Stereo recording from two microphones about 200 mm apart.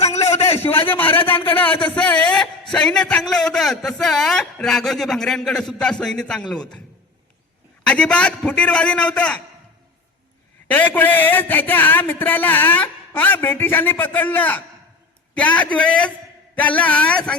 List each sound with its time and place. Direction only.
0.1 s a sound: 30° left (ahead or behind)
0.9 s a man's voice: 10° left (ahead or behind)
1.2 s speech: 25° left (ahead or behind)
2.0 s a sound: 5° left (ahead or behind)
2.7 s a man's voice: 5° left (ahead or behind)
7.9 s a man's voice: 5° left (ahead or behind)
10.7 s a man's voice: 10° left (ahead or behind)